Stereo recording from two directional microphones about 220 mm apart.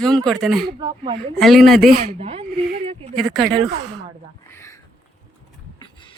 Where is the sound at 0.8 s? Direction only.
20° right (ahead or behind).